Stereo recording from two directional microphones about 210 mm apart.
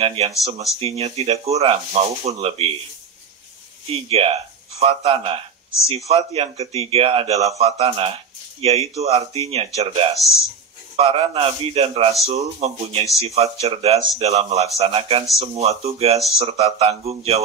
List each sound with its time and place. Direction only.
0.0 s speech: 25° right (ahead or behind)
3.9 s speech: 30° right (ahead or behind)